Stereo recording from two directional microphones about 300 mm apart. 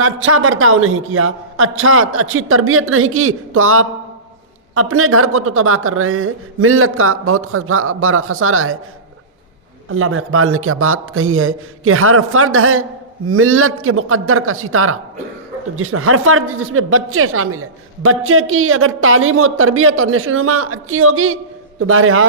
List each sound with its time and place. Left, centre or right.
0.0 s speech: right
9.9 s speech: right